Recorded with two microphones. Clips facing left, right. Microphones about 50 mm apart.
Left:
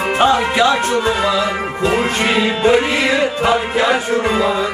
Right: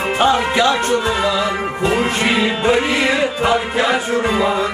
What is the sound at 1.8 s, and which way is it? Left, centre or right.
Speech, centre.